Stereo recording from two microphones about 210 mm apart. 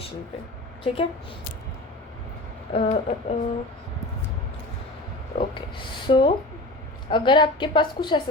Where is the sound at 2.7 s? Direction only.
30° left (ahead or behind).